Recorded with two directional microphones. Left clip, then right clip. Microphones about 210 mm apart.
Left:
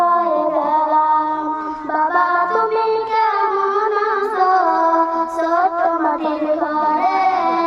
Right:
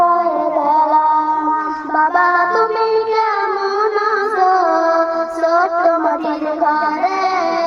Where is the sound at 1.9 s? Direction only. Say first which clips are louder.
Right 3 dB; 40° right (ahead or behind).